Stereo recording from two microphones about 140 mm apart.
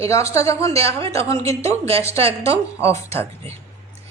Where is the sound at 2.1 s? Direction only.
45° right (ahead or behind).